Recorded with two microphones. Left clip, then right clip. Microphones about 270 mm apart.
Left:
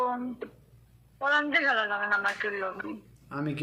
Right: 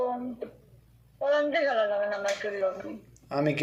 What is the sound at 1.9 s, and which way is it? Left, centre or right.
Speech, left.